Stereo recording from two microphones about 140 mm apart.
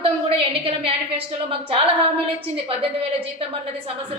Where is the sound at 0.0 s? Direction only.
45° right (ahead or behind).